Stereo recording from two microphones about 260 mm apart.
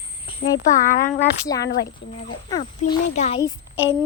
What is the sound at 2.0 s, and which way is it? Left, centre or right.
Speech, left.